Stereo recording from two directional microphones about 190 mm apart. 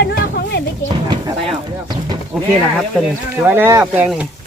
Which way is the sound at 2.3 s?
5° right (ahead or behind).